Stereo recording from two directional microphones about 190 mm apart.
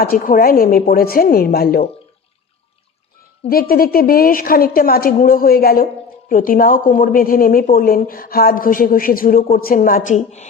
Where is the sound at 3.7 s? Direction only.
50° left (ahead or behind).